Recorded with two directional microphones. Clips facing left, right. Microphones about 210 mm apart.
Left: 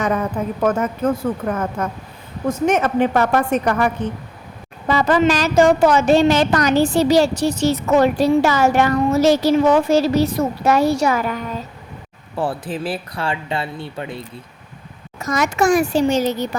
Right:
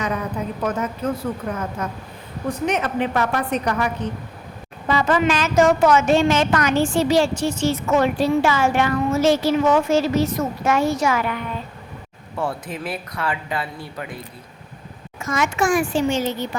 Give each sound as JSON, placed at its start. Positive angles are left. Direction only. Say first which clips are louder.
{"t": 0.0, "sound": "a woman's voice", "louder": "left 5 dB", "side_deg": 50}
{"t": 4.9, "sound": "a woman's voice", "louder": "left 3 dB", "side_deg": 40}
{"t": 15.2, "sound": "a woman's voice", "louder": "left 3 dB", "side_deg": 40}